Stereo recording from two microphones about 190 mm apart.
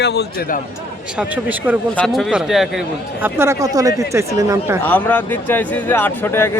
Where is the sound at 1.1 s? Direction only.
5° right (ahead or behind).